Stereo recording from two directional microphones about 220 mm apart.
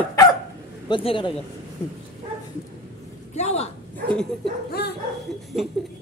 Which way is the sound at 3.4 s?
30° left (ahead or behind).